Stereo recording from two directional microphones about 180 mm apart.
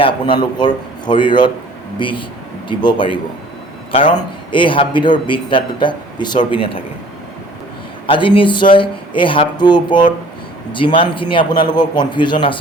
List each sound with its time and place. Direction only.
0.0 s a man's voice: 25° left (ahead or behind)
4.5 s a man's voice: 25° left (ahead or behind)
8.0 s a man's voice: 30° left (ahead or behind)